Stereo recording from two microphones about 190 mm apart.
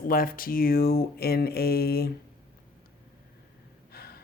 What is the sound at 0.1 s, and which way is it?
Speech, 50° left (ahead or behind).